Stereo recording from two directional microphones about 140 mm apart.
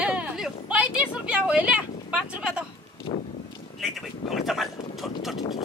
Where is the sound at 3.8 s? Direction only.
Centre (ahead or behind).